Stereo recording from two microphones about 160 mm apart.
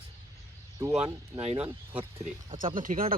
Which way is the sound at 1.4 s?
35° right (ahead or behind).